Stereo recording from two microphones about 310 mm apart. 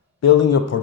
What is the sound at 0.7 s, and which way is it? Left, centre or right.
Speech, left.